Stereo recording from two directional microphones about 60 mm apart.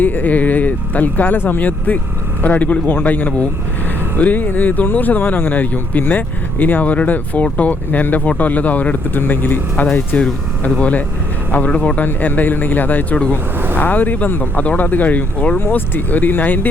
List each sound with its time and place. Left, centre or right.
0.0 s speech: left